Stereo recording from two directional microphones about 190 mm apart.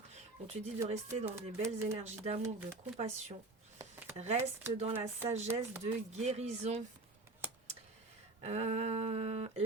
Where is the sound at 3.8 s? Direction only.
10° right (ahead or behind).